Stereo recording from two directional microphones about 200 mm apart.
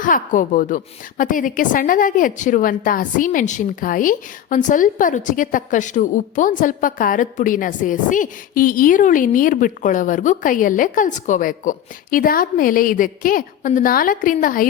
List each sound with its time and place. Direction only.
0.0 s a woman's voice: 40° left (ahead or behind)